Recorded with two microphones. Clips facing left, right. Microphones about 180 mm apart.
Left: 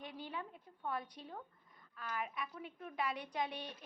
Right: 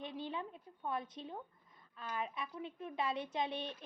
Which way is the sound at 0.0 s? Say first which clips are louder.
Right 4 dB; 25° right (ahead or behind).